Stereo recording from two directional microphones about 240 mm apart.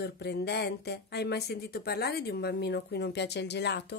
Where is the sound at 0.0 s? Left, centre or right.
Left.